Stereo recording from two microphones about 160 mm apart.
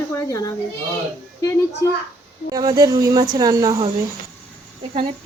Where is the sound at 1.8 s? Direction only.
20° left (ahead or behind).